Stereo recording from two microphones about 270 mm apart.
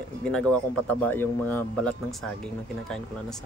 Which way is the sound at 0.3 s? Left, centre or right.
Centre.